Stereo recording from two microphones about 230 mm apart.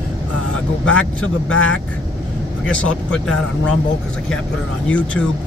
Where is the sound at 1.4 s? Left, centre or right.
Left.